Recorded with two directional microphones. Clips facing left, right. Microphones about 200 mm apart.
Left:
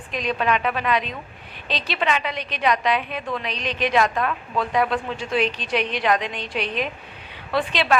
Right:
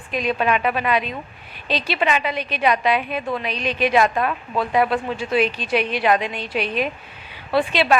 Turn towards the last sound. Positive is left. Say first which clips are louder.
# right 4 dB
turn(degrees=-10)  # may be behind; listen again after turning